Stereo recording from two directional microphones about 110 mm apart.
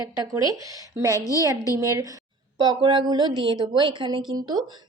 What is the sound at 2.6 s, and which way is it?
Speech, 45° right (ahead or behind).